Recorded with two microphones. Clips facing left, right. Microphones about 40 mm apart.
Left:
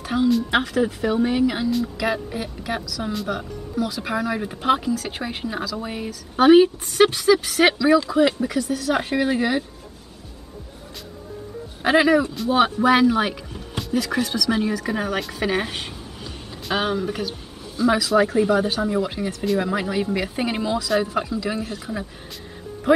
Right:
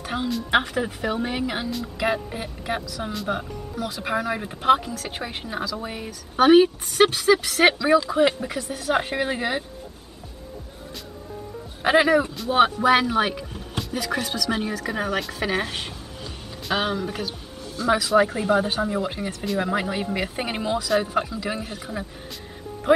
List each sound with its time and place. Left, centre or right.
0.0 s a sound: centre
0.5 s speech: centre
3.0 s speech: centre
3.9 s speech: centre
7.6 s speech: centre
8.9 s speech: centre
11.8 s speech: centre